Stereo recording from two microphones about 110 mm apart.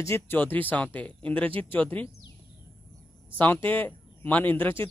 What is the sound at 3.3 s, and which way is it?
Speech, 15° left (ahead or behind).